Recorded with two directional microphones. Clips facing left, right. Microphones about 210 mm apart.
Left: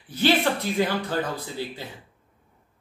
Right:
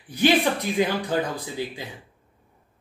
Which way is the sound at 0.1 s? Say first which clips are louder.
Right 2 dB; 15° right (ahead or behind).